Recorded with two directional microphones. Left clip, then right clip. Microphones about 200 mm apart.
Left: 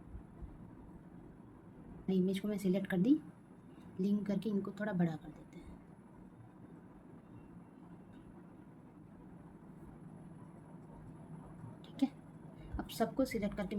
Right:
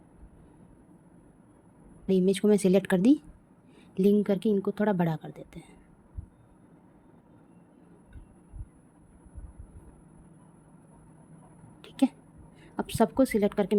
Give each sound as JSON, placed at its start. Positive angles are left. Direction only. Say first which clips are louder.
{"t": 2.0, "sound": "a woman's voice", "louder": "right 13 dB", "side_deg": -55}
{"t": 11.8, "sound": "a sound", "louder": "right 10 dB", "side_deg": -55}
{"t": 12.7, "sound": "a woman's voice", "louder": "right 11 dB", "side_deg": -55}